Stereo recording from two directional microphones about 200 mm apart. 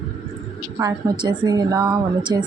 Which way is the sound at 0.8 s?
20° right (ahead or behind).